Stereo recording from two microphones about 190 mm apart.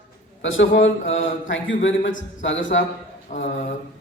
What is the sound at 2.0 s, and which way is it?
Speech, 45° left (ahead or behind).